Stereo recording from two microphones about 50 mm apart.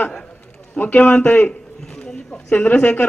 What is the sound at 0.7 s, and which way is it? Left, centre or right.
Speech, left.